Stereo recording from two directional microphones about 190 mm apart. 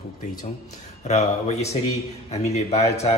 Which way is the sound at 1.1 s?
35° left (ahead or behind).